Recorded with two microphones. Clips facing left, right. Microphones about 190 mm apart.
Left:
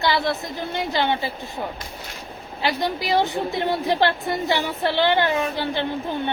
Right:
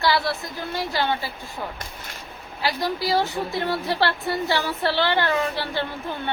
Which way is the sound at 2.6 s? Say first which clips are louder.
Left 1 dB; 20° left (ahead or behind).